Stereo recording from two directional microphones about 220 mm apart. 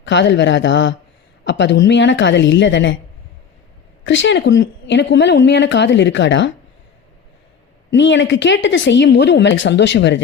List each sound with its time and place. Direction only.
0.0 s a woman's voice: 55° left (ahead or behind)
4.0 s a woman's voice: 60° left (ahead or behind)
7.9 s a woman's voice: 55° left (ahead or behind)